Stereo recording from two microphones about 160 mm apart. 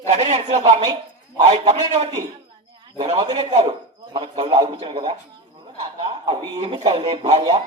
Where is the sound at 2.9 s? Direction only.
35° right (ahead or behind).